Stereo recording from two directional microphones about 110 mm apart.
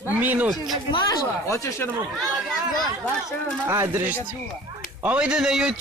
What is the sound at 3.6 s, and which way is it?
Speech, 20° right (ahead or behind).